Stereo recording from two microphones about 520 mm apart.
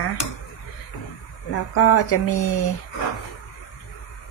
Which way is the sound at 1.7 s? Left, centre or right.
Left.